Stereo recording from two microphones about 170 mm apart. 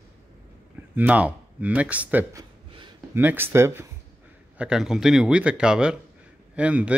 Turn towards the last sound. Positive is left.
turn(degrees=-10)  # may be behind; listen again after turning